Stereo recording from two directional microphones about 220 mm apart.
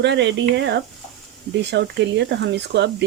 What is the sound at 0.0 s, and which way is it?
Speech, 50° right (ahead or behind).